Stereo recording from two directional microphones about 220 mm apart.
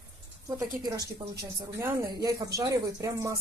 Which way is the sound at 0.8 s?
15° right (ahead or behind).